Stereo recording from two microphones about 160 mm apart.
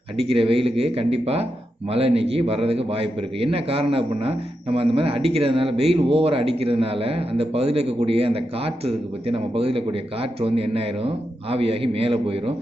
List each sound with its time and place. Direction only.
0.2 s a man's voice: 35° right (ahead or behind)